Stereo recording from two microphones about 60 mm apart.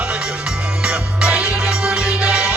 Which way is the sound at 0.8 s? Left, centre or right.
Centre.